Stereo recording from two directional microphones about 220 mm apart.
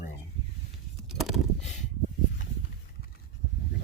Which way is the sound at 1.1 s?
Centre (ahead or behind).